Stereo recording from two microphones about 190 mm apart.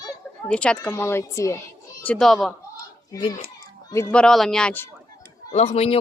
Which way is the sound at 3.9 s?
5° left (ahead or behind).